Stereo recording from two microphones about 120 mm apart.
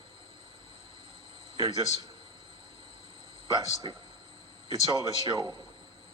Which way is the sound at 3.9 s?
40° right (ahead or behind).